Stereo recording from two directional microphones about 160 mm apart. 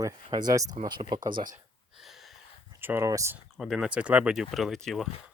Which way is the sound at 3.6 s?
5° right (ahead or behind).